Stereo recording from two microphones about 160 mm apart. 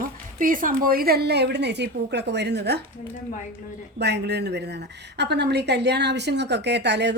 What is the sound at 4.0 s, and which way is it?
A woman's voice, 90° right.